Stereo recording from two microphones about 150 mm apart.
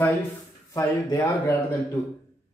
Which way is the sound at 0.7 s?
25° left (ahead or behind).